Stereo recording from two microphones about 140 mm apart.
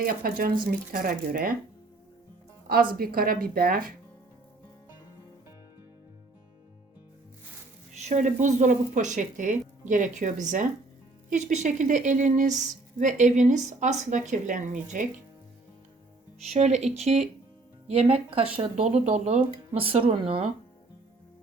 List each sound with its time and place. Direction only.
0.0 s a woman's voice: 90° right
2.9 s a woman's voice: 90° right
8.0 s speech: 60° right (ahead or behind)
16.5 s speech: 55° right (ahead or behind)